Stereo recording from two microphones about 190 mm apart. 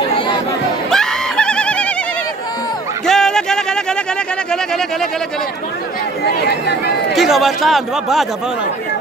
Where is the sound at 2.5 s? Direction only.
20° left (ahead or behind).